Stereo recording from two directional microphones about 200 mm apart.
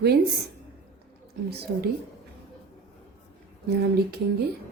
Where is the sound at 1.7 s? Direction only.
65° right (ahead or behind).